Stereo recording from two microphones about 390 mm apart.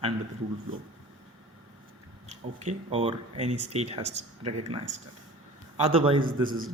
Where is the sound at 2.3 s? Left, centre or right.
Centre.